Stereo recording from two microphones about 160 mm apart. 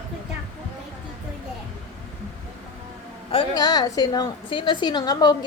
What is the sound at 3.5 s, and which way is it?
A woman's voice, 25° left (ahead or behind).